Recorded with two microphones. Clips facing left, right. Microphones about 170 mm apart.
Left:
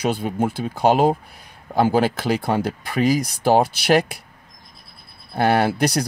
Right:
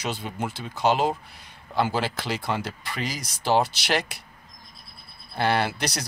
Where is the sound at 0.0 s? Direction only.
55° left (ahead or behind).